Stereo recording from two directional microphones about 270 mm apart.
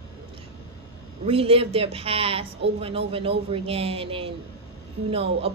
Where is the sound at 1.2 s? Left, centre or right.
Right.